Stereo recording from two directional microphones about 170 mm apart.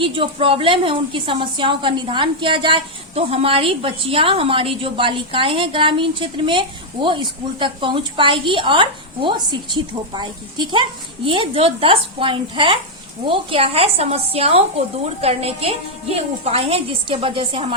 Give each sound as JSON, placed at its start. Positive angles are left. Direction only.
{"t": 0.0, "sound": "a woman's voice", "side_deg": -30}